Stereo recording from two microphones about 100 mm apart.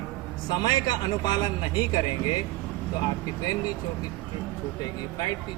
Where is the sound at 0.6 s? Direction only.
45° left (ahead or behind).